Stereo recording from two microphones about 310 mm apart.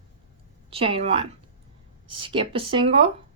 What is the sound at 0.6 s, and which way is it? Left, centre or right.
Speech, centre.